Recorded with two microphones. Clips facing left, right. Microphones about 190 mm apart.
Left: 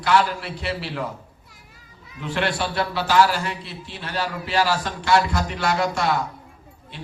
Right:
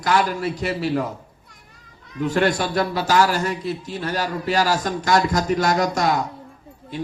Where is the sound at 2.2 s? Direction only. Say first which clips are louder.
Right 5 dB; 45° right (ahead or behind).